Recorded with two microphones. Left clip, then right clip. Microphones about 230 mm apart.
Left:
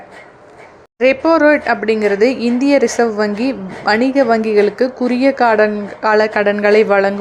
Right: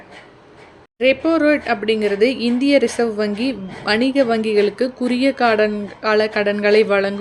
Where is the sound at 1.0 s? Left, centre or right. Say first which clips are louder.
Left 5 dB; centre.